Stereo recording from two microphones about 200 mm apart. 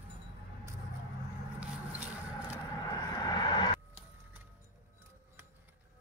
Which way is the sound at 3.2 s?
20° left (ahead or behind).